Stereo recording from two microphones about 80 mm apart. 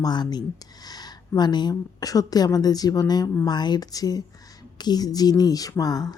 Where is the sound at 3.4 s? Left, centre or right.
Left.